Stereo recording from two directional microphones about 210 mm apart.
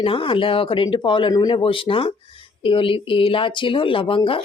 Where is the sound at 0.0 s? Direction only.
25° left (ahead or behind).